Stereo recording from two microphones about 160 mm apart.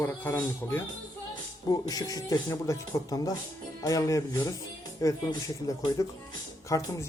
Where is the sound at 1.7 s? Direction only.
25° left (ahead or behind).